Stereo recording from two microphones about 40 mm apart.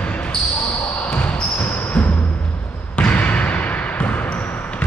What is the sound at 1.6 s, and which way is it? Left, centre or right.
Basketball bounce, left.